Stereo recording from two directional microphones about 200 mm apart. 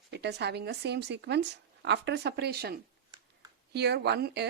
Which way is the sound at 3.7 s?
55° right (ahead or behind).